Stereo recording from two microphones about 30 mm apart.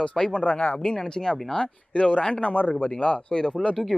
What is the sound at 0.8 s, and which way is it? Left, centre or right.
Speech, left.